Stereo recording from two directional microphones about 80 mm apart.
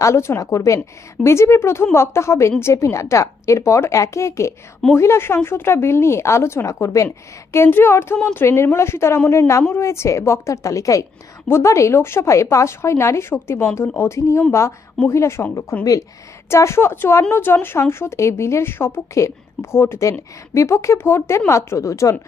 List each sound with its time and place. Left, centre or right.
0.0 s a woman's voice: left
7.5 s a woman's voice: left